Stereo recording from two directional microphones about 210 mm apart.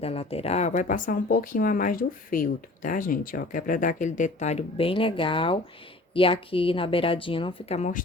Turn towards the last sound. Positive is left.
turn(degrees=30)  # may be behind; listen again after turning